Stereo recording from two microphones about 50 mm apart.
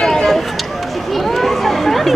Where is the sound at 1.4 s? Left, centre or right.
Centre.